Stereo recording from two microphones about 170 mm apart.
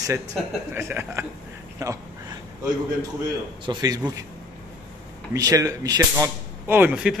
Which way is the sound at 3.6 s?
25° right (ahead or behind).